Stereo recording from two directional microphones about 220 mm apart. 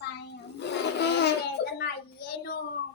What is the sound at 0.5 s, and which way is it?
Child singing, 50° left (ahead or behind).